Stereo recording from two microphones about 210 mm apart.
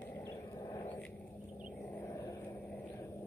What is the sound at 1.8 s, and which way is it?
Vehicle, 10° left (ahead or behind).